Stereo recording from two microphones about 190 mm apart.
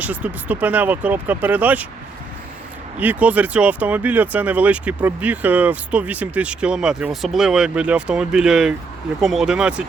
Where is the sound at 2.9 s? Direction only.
10° right (ahead or behind).